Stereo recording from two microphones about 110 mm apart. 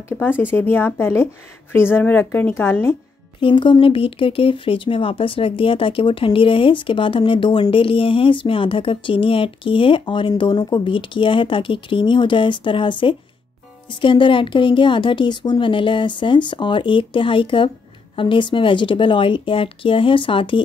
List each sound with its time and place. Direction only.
0.2 s a woman's voice: 20° left (ahead or behind)
3.3 s speech: 50° left (ahead or behind)